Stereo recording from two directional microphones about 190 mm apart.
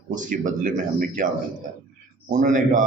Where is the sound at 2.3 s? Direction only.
45° right (ahead or behind).